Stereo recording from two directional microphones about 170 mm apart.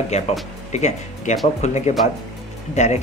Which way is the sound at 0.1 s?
40° left (ahead or behind).